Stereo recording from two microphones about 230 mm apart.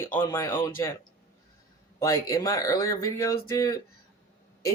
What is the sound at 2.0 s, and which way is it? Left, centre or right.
Speech, centre.